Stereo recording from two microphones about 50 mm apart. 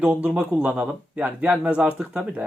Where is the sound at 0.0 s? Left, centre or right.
Right.